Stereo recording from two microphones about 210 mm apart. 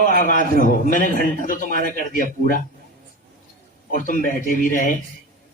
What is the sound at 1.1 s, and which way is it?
Speech, 40° right (ahead or behind).